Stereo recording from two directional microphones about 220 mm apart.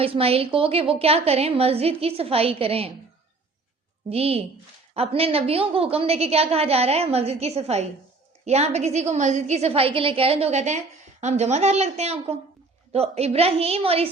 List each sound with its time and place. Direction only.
0.0 s a woman's voice: 25° right (ahead or behind)
4.1 s a woman's voice: 25° right (ahead or behind)